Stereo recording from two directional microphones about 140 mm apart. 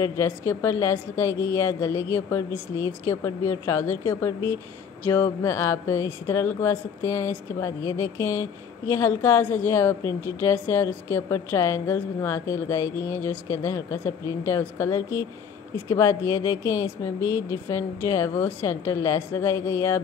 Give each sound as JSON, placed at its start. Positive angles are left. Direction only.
{"t": 0.0, "sound": "speech", "side_deg": 20}